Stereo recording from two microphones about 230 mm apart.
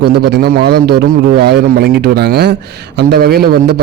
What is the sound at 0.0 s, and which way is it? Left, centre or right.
A man's voice, right.